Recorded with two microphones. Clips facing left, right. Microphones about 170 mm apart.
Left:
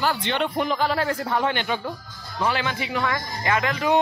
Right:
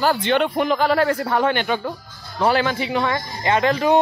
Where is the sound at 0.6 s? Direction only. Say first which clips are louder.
Right 5 dB; 70° right (ahead or behind).